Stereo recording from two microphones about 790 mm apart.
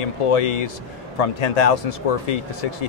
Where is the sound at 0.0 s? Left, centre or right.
Left.